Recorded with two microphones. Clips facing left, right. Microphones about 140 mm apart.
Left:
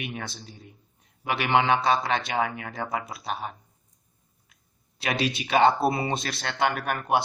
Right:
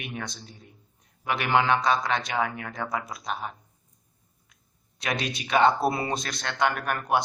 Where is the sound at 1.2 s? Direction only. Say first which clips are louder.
Left 1 dB; 25° left (ahead or behind).